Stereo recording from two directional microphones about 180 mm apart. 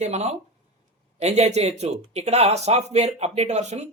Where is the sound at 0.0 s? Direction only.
40° right (ahead or behind).